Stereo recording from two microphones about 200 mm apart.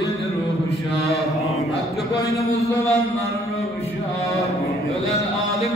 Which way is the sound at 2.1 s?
15° left (ahead or behind).